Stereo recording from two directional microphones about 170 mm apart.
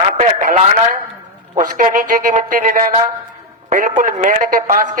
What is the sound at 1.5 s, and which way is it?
A man's voice, 50° right (ahead or behind).